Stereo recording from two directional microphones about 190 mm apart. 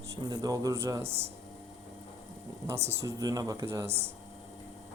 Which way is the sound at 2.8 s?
15° right (ahead or behind).